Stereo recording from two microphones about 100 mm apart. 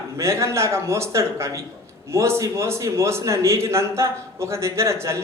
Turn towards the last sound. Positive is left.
turn(degrees=-30)  # may be behind; listen again after turning